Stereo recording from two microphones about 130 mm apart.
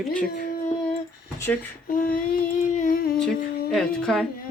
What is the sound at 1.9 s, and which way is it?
Child singing, 90° left.